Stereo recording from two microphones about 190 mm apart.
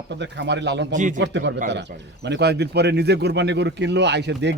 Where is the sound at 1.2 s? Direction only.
65° right (ahead or behind).